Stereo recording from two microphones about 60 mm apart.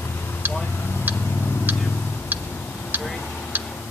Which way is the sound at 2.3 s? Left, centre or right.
Right.